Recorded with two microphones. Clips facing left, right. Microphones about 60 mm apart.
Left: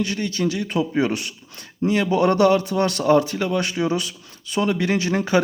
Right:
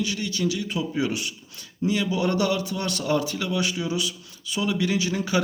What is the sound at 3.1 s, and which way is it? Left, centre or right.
Speech, left.